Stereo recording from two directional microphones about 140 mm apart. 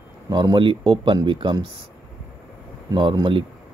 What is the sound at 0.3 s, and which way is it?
Speech, 30° right (ahead or behind).